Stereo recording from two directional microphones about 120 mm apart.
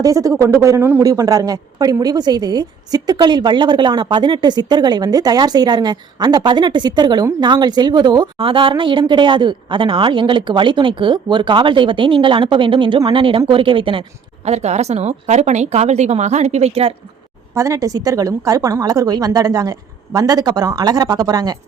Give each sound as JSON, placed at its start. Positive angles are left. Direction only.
{"t": 0.0, "sound": "speech", "side_deg": -30}
{"t": 1.0, "sound": "a woman's voice", "side_deg": -30}
{"t": 14.4, "sound": "a woman's voice", "side_deg": -65}
{"t": 17.5, "sound": "a woman's voice", "side_deg": -25}